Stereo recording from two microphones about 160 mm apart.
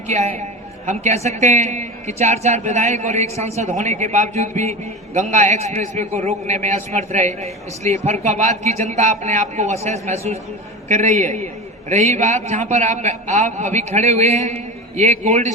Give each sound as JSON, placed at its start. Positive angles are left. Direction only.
{"t": 0.1, "sound": "a man's voice", "side_deg": -45}